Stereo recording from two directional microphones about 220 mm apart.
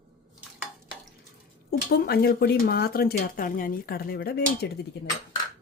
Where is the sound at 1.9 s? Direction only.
45° left (ahead or behind).